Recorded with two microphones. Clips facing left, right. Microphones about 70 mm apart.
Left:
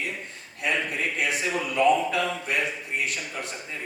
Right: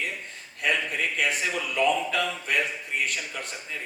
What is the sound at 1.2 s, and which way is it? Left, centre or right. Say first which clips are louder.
Speech: left 1 dB; left.